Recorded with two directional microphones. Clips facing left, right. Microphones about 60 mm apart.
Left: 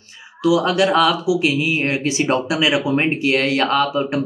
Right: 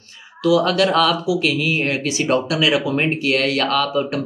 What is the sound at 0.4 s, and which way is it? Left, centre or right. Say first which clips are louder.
Speech: even; centre.